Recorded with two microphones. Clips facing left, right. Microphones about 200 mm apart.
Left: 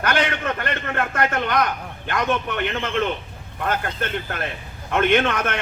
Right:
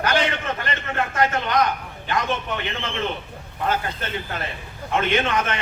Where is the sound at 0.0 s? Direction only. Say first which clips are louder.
Even; 55° left (ahead or behind).